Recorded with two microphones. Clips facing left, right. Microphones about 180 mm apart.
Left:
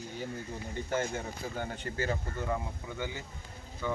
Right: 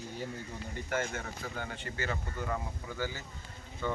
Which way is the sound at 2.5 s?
20° left (ahead or behind).